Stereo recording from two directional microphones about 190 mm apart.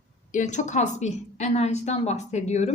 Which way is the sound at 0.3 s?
40° left (ahead or behind).